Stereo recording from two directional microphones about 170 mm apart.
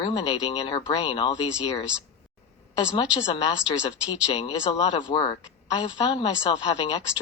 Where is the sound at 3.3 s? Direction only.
35° left (ahead or behind).